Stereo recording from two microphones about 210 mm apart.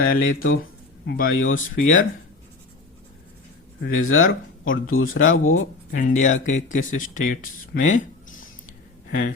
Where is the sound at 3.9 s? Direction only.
75° left (ahead or behind).